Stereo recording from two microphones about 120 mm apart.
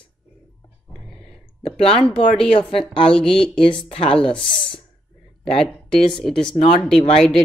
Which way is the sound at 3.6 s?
45° left (ahead or behind).